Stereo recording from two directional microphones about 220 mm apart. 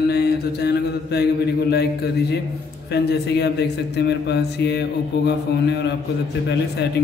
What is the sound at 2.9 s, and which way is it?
A man's voice, 50° left (ahead or behind).